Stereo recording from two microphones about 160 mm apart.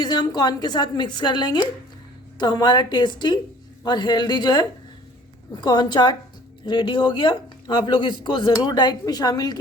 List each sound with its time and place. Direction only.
0.0 s a woman's voice: 25° left (ahead or behind)